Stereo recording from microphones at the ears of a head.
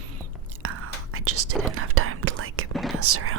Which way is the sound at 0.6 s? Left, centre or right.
Right.